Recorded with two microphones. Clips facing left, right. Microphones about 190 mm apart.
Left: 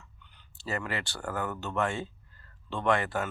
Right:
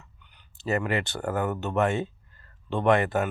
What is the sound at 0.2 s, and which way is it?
Speech, 15° right (ahead or behind).